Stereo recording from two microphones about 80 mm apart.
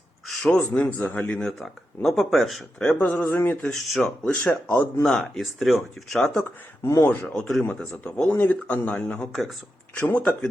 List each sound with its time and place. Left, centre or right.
0.3 s a sound: centre
0.7 s speech: left
1.5 s speech: centre
3.0 s speech: centre
3.7 s speech: centre
6.8 s speech: left
7.3 s speech: centre
7.6 s speech: centre